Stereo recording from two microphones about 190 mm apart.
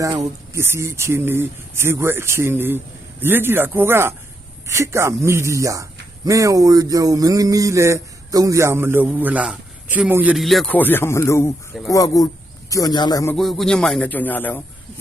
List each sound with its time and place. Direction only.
0.0 s speech: 15° right (ahead or behind); by 13.3 s 20° left (ahead or behind)
13.3 s speech: centre (ahead or behind)